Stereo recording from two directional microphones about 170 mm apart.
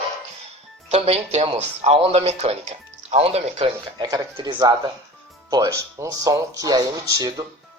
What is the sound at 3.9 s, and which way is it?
Speech, 20° right (ahead or behind).